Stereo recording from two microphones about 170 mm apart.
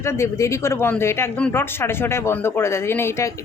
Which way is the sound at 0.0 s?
15° left (ahead or behind).